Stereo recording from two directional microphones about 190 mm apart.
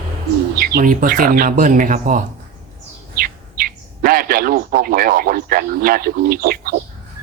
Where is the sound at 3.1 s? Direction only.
50° right (ahead or behind).